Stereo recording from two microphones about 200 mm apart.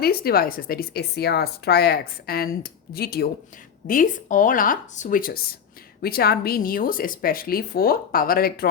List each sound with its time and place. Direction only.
0.0 s speech: 50° left (ahead or behind)